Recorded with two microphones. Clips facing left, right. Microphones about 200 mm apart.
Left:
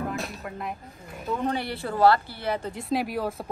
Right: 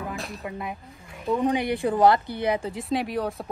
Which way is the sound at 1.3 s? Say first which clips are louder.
Right 5 dB; 15° right (ahead or behind).